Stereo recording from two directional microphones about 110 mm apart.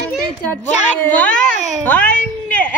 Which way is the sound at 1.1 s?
10° left (ahead or behind).